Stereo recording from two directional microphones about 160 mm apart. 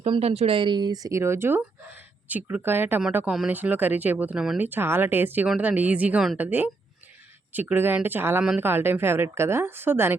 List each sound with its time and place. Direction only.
0.0 s speech: 40° right (ahead or behind); by 10.2 s 15° right (ahead or behind)